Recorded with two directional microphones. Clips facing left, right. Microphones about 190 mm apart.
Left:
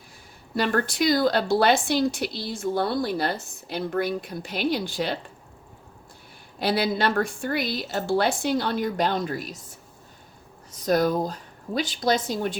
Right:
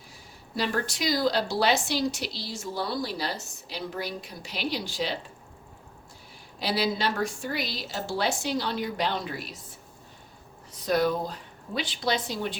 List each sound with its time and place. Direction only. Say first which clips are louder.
0.5 s a woman's voice: left 5 dB; 55° left (ahead or behind)
6.6 s a woman's voice: left 4 dB; 55° left (ahead or behind)
10.7 s a woman's voice: left 3 dB; 45° left (ahead or behind)